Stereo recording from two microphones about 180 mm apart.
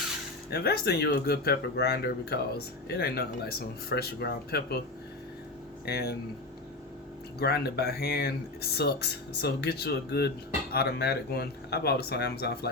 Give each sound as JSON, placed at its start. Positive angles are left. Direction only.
{"t": 0.5, "sound": "speech", "side_deg": 60}
{"t": 5.8, "sound": "speech", "side_deg": 60}
{"t": 7.3, "sound": "speech", "side_deg": 65}